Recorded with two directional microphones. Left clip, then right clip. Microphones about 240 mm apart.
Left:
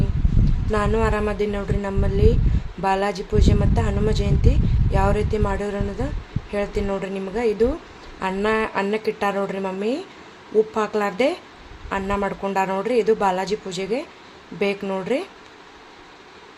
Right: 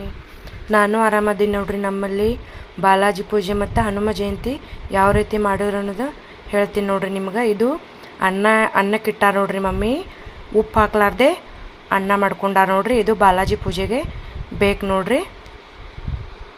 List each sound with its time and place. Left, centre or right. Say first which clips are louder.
0.7 s speech: right 6 dB; centre